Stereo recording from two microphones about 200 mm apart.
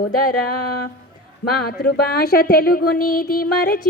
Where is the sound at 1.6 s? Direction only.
50° left (ahead or behind).